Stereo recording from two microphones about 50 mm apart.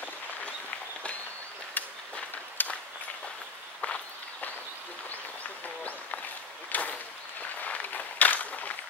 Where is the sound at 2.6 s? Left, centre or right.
Left.